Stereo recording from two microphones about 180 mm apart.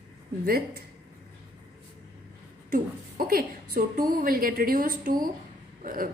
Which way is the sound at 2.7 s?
50° right (ahead or behind).